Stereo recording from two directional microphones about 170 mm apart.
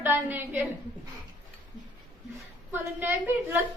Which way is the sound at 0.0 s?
10° right (ahead or behind).